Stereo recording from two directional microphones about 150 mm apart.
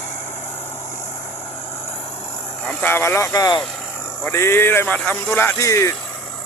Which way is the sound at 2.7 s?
15° left (ahead or behind).